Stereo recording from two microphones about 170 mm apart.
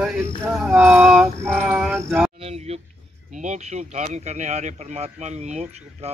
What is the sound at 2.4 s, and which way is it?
Speech, 35° right (ahead or behind).